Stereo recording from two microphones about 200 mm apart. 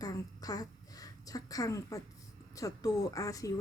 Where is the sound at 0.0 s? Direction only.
20° left (ahead or behind).